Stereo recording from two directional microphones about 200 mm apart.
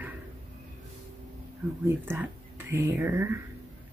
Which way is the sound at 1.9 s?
10° right (ahead or behind).